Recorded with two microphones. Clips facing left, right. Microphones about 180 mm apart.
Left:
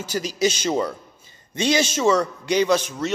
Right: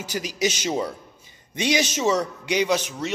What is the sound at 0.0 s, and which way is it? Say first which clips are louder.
A man's voice: left 3 dB; 15° right (ahead or behind).